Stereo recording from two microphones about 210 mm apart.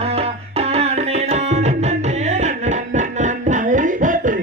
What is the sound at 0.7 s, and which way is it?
Music, 30° right (ahead or behind).